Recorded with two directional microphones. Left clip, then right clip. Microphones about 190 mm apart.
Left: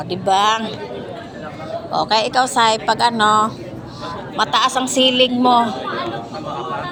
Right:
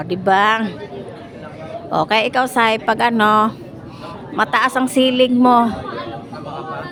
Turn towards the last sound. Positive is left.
turn(degrees=-35)  # may be behind; listen again after turning